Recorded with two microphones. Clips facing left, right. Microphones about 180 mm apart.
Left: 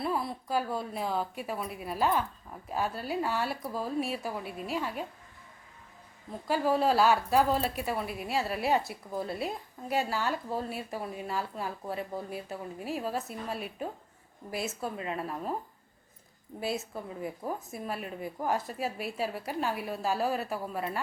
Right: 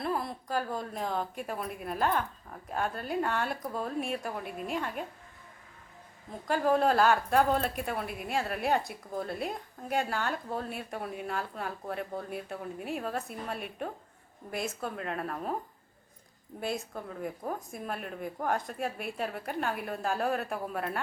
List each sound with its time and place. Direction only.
0.0 s a woman's voice: centre (ahead or behind)
6.5 s a woman's voice: 5° left (ahead or behind)
16.6 s a woman's voice: 5° left (ahead or behind)